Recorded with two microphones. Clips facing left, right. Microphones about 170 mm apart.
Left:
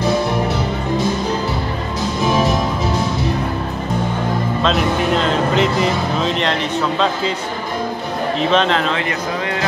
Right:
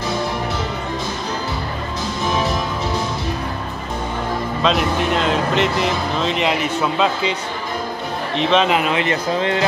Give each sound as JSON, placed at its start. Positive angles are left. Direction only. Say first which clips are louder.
{"t": 4.6, "sound": "speech", "louder": "even", "side_deg": 0}
{"t": 8.4, "sound": "speech", "louder": "right 1 dB", "side_deg": 0}
{"t": 9.0, "sound": "speech", "louder": "right 2 dB", "side_deg": -25}